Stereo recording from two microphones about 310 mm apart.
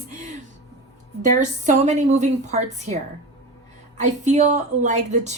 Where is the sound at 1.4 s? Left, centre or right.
Right.